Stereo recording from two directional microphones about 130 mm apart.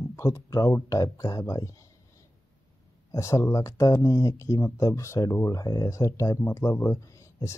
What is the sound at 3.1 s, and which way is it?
Speech, 25° left (ahead or behind).